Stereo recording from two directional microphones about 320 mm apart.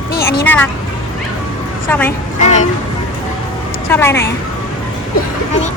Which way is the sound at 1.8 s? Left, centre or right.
Centre.